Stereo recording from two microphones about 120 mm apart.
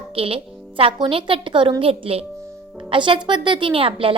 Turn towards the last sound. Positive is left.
turn(degrees=-50)  # may be behind; listen again after turning